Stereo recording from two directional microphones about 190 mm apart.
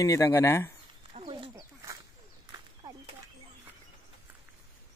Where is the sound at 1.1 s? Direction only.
25° right (ahead or behind).